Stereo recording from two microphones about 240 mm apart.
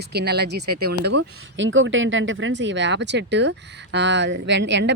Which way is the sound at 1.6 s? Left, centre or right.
Right.